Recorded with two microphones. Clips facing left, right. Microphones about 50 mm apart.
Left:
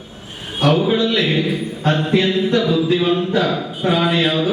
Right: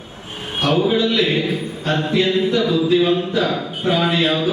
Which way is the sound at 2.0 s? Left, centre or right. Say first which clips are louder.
Right 1 dB; left.